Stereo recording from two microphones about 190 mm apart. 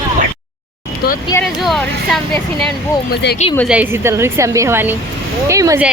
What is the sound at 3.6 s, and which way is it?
A woman's voice, 10° right (ahead or behind).